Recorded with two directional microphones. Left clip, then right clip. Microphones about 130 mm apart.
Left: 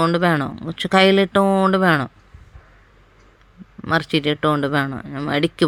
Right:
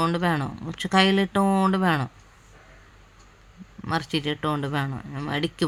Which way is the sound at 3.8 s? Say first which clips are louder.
Left 7 dB; 40° left (ahead or behind).